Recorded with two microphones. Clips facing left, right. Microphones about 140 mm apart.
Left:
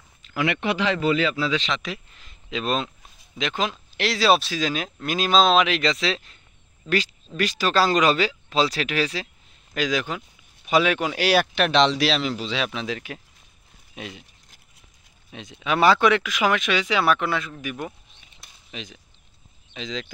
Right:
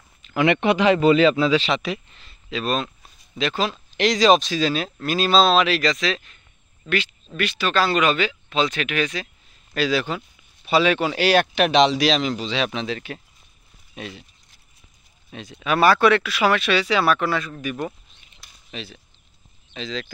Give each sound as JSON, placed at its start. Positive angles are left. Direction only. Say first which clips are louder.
{"t": 0.2, "sound": "a sound", "louder": "right 5 dB", "side_deg": -20}
{"t": 0.7, "sound": "speech", "louder": "right 6 dB", "side_deg": -20}
{"t": 1.5, "sound": "speech", "louder": "right 6 dB", "side_deg": -10}
{"t": 2.1, "sound": "speech", "louder": "right 1 dB", "side_deg": 15}
{"t": 3.9, "sound": "speech", "louder": "right 4 dB", "side_deg": 5}
{"t": 7.3, "sound": "speech", "louder": "left 1 dB", "side_deg": 40}
{"t": 9.8, "sound": "speech", "louder": "right 3 dB", "side_deg": 15}
{"t": 11.5, "sound": "speech", "louder": "right 2 dB", "side_deg": -5}
{"t": 15.3, "sound": "speech", "louder": "right 2 dB", "side_deg": 15}